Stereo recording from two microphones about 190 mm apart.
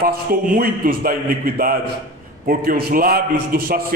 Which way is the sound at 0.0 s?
50° right (ahead or behind).